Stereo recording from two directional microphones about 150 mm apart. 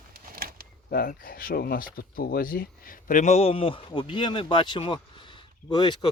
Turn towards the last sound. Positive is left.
turn(degrees=30)  # may be behind; listen again after turning